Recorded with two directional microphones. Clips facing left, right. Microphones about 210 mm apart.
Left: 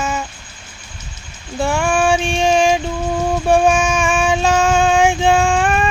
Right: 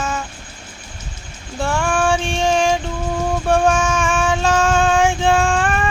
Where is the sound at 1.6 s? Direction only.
10° left (ahead or behind).